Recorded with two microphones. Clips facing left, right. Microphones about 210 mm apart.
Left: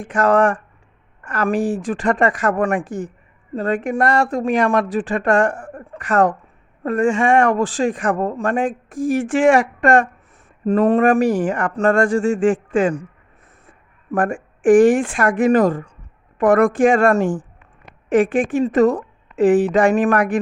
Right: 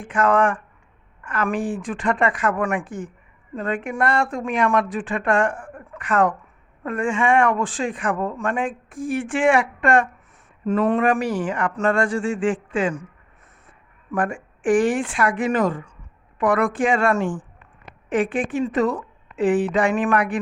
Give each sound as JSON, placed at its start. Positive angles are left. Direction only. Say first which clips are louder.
{"t": 0.0, "sound": "speech", "louder": "left 3 dB", "side_deg": 40}
{"t": 14.1, "sound": "speech", "louder": "left 4 dB", "side_deg": 45}